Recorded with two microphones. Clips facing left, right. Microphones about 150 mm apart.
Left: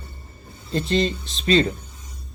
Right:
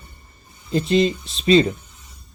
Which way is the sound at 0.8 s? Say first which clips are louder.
Right 4 dB; 35° left (ahead or behind).